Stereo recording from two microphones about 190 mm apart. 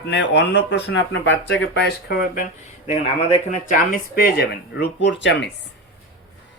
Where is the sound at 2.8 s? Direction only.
35° left (ahead or behind); by 5.5 s 65° left (ahead or behind).